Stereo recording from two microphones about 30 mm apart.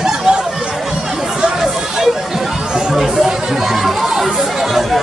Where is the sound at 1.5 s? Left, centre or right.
Centre.